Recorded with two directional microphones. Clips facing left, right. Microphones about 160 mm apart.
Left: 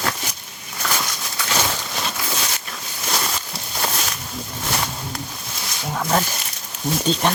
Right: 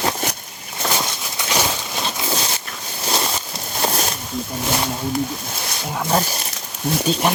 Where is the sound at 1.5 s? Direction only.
10° right (ahead or behind).